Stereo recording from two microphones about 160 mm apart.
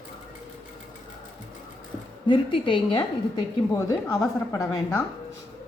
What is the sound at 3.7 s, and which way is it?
Speech, 20° left (ahead or behind).